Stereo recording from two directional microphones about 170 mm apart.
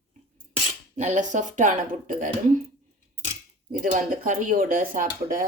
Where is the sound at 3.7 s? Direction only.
50° right (ahead or behind).